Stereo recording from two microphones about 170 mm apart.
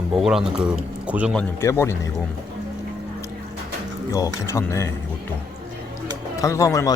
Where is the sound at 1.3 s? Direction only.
15° left (ahead or behind).